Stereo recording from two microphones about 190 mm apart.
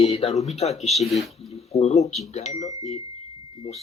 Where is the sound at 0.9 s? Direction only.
Centre (ahead or behind).